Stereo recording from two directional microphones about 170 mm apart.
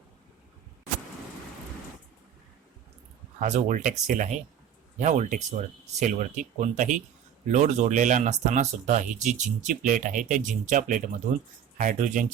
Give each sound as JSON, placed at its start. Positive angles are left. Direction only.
{"t": 3.4, "sound": "speech", "side_deg": -45}